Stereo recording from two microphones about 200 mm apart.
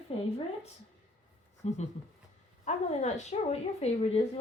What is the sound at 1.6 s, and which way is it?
A woman's voice, 35° left (ahead or behind).